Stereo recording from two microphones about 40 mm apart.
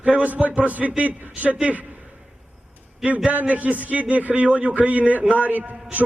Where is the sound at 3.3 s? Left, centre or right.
Right.